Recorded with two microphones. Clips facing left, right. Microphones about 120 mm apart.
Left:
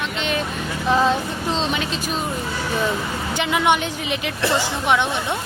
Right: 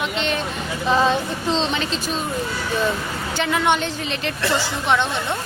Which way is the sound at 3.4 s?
15° left (ahead or behind).